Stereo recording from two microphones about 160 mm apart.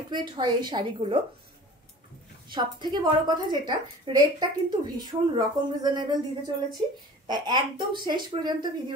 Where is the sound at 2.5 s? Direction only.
30° right (ahead or behind).